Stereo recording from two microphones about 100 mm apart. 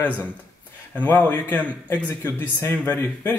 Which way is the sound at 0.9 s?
15° left (ahead or behind).